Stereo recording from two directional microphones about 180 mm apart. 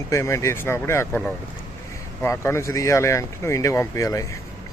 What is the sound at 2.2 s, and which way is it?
Speech, 15° left (ahead or behind).